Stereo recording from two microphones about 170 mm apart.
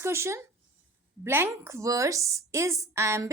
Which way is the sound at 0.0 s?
15° right (ahead or behind).